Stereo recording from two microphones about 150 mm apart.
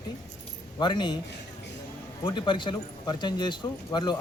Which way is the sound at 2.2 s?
30° left (ahead or behind).